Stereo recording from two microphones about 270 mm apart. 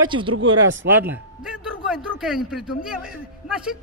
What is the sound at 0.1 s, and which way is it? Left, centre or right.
Speech, centre.